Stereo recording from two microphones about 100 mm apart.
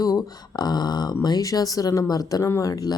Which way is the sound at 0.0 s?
40° left (ahead or behind).